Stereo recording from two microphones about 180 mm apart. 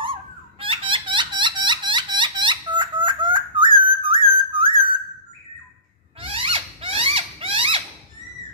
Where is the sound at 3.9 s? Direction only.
30° right (ahead or behind).